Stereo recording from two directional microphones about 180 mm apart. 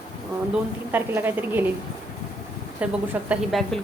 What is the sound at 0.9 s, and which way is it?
Speech, 10° right (ahead or behind).